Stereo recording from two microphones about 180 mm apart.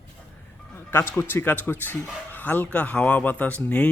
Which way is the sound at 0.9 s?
15° left (ahead or behind).